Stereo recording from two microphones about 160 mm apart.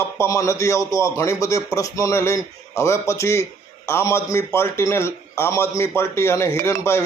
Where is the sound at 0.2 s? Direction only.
20° left (ahead or behind).